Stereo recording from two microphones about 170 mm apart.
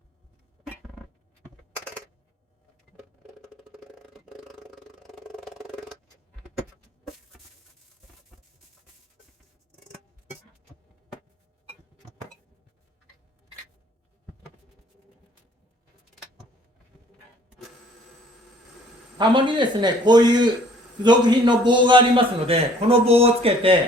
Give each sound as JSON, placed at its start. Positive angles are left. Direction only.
{"t": 19.2, "sound": "a man's voice", "side_deg": -25}